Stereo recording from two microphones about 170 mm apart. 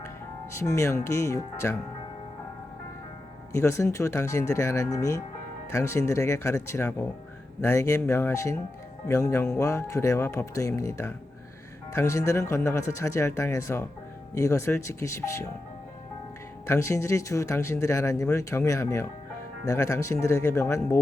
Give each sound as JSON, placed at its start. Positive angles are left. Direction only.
{"t": 0.5, "sound": "speech", "side_deg": 15}
{"t": 3.5, "sound": "speech", "side_deg": 15}
{"t": 16.6, "sound": "speech", "side_deg": 15}